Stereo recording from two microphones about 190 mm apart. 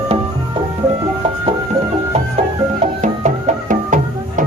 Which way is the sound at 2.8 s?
40° right (ahead or behind).